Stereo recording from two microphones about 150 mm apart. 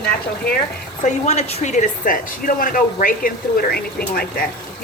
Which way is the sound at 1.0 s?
50° left (ahead or behind).